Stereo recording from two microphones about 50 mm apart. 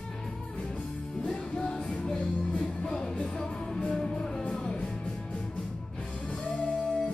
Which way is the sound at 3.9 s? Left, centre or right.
Centre.